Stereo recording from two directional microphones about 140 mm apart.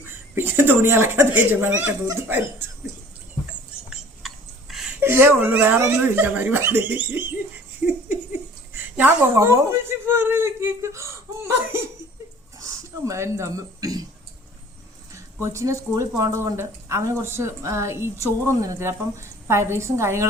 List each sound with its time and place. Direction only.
0.0 s speech: 15° right (ahead or behind)
4.7 s a sound: 5° right (ahead or behind)
4.9 s speech: 15° right (ahead or behind)
12.5 s speech: 20° right (ahead or behind)
15.1 s speech: 20° right (ahead or behind)